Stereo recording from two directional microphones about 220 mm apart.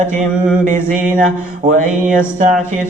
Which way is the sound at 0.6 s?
35° right (ahead or behind).